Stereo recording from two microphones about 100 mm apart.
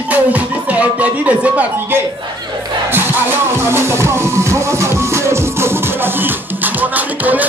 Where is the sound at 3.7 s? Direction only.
25° right (ahead or behind).